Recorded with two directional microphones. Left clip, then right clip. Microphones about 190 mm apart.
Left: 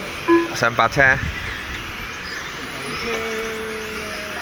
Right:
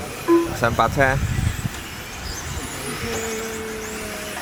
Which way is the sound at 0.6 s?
5° right (ahead or behind).